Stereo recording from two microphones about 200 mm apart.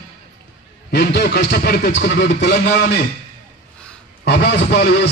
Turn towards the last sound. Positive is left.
turn(degrees=55)  # may be behind; listen again after turning